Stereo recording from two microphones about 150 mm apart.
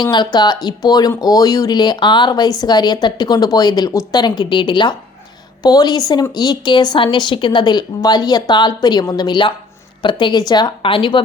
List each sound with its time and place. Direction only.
0.0 s a woman's voice: 30° left (ahead or behind)